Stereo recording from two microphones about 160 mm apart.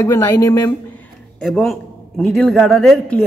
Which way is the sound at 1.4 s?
5° left (ahead or behind).